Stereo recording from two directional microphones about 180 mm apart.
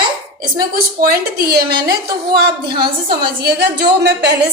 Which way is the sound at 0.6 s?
55° right (ahead or behind).